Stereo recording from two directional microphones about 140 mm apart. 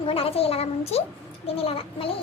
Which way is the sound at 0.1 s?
45° left (ahead or behind).